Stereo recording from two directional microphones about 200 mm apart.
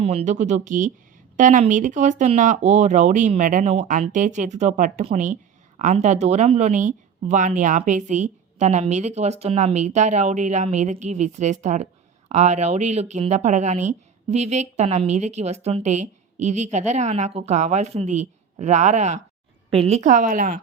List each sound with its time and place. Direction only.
0.0 s speech: 30° right (ahead or behind)